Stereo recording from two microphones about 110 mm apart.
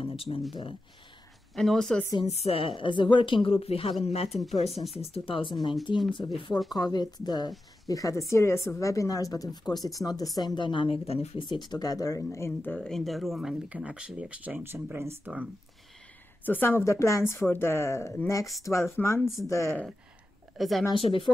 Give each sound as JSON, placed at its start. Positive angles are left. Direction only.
{"t": 0.0, "sound": "a sound", "side_deg": 55}
{"t": 1.5, "sound": "speech", "side_deg": 5}
{"t": 2.2, "sound": "a woman's voice", "side_deg": 75}
{"t": 2.8, "sound": "a woman's voice", "side_deg": 50}
{"t": 3.4, "sound": "speech", "side_deg": 60}
{"t": 4.0, "sound": "a woman's voice", "side_deg": 70}
{"t": 4.4, "sound": "speech", "side_deg": 0}
{"t": 5.1, "sound": "a woman's voice", "side_deg": 55}
{"t": 12.7, "sound": "speech", "side_deg": 5}
{"t": 15.3, "sound": "speech", "side_deg": -10}
{"t": 16.4, "sound": "a woman's voice", "side_deg": 20}
{"t": 20.5, "sound": "speech", "side_deg": 0}
{"t": 20.9, "sound": "a woman's voice", "side_deg": 50}